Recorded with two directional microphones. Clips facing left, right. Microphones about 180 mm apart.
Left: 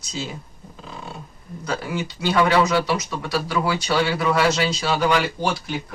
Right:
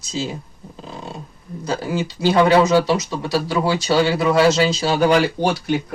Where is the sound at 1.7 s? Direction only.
30° right (ahead or behind).